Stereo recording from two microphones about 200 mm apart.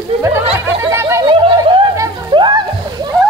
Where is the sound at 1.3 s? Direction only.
25° right (ahead or behind).